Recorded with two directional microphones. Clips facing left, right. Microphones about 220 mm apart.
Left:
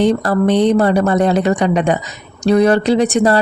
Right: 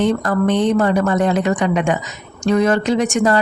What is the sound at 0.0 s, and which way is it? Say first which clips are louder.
Speech: left 3 dB; 35° left (ahead or behind).